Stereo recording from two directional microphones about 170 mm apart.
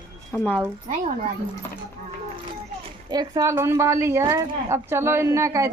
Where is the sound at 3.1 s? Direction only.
20° right (ahead or behind).